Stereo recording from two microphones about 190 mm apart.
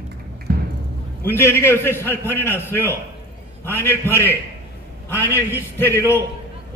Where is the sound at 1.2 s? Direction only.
10° left (ahead or behind).